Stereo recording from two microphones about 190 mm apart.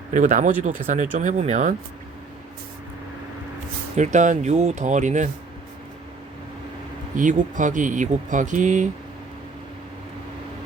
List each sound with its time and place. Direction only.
0.1 s speech: 40° right (ahead or behind)
3.9 s speech: 40° right (ahead or behind)
7.2 s speech: 45° right (ahead or behind)